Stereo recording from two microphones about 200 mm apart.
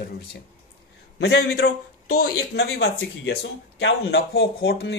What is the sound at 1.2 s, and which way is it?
Speech, 55° left (ahead or behind).